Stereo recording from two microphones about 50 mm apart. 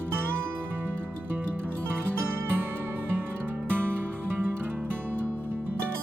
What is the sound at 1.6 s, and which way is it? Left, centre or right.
Music, right.